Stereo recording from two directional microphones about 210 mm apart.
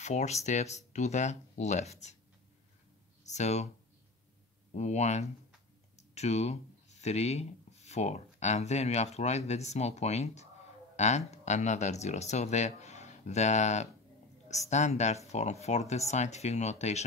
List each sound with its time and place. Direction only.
0.0 s speech: 35° left (ahead or behind)
3.3 s speech: 35° left (ahead or behind)
4.7 s speech: 35° left (ahead or behind)